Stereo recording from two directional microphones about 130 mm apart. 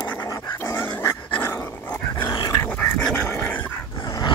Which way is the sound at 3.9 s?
30° left (ahead or behind).